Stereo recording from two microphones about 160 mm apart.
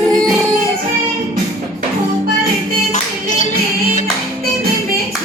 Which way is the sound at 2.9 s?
50° left (ahead or behind).